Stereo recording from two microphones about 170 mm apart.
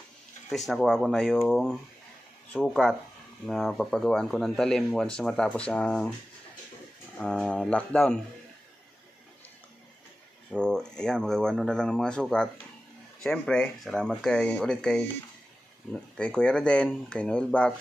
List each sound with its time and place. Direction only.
0.5 s speech: centre (ahead or behind)
7.2 s speech: 5° left (ahead or behind)
10.5 s speech: 5° left (ahead or behind)